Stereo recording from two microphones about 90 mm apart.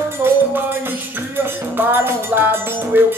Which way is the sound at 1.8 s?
25° right (ahead or behind).